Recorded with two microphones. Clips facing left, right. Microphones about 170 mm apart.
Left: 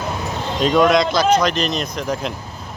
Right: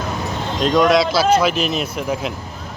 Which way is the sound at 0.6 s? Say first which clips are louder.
Even; centre (ahead or behind).